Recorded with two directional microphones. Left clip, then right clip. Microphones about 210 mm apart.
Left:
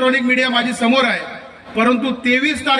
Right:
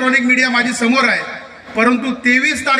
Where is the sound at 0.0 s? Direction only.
60° left (ahead or behind).